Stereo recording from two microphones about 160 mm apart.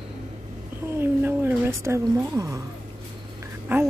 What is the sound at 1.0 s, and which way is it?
Speech, 15° right (ahead or behind).